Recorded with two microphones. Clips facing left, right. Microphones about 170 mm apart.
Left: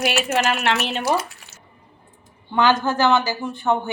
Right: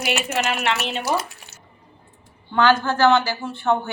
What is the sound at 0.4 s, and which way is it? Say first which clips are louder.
Speech: left 2 dB; 45° left (ahead or behind).